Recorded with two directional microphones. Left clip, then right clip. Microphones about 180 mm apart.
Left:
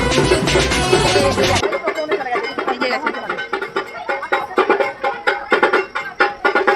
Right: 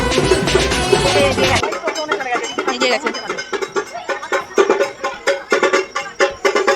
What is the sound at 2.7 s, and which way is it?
Music, 30° right (ahead or behind).